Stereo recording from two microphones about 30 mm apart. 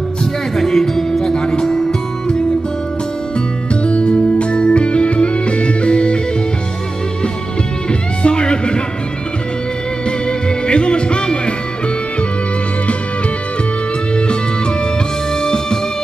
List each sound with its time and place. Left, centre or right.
0.6 s music: centre
1.2 s music: left
3.8 s music: left
7.9 s music: left
10.7 s music: left
14.1 s music: left
15.4 s music: left